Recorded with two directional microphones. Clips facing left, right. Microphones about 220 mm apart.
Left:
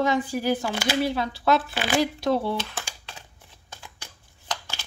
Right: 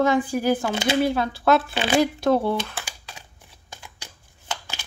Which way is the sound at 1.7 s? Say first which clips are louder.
Right 3 dB; 25° right (ahead or behind).